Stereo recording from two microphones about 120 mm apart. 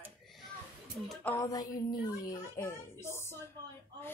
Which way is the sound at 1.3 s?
30° left (ahead or behind).